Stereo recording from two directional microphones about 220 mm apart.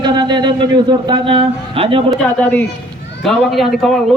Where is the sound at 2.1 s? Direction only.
5° left (ahead or behind).